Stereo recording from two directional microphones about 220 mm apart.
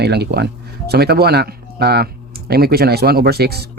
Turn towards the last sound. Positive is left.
turn(degrees=-45)  # may be behind; listen again after turning